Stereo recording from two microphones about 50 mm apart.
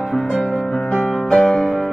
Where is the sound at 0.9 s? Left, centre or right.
Centre.